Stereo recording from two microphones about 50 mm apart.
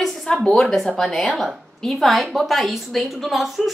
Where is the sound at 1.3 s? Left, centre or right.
Centre.